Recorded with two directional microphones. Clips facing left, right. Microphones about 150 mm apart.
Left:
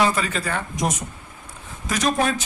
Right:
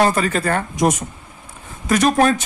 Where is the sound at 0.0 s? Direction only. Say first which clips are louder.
Right 5 dB; 50° right (ahead or behind).